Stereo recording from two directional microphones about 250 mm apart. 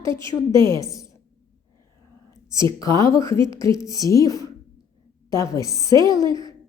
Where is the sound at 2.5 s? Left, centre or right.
Centre.